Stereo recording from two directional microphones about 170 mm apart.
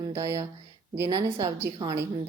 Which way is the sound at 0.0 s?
20° right (ahead or behind).